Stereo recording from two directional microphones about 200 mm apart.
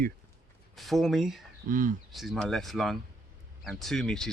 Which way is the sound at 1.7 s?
40° right (ahead or behind).